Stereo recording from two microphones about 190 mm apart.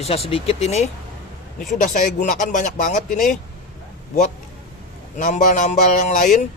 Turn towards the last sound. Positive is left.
turn(degrees=40)  # may be behind; listen again after turning